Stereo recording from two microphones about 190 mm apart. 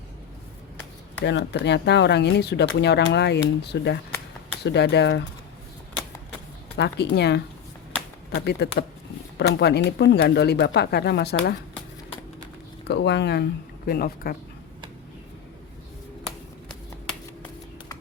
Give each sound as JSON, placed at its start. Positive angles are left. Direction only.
{"t": 1.2, "sound": "speech", "side_deg": 65}
{"t": 6.7, "sound": "speech", "side_deg": 60}
{"t": 12.9, "sound": "speech", "side_deg": 65}
{"t": 13.8, "sound": "speech", "side_deg": 50}